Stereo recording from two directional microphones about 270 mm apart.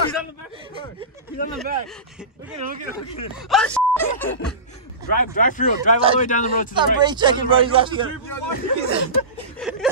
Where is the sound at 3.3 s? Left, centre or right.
Centre.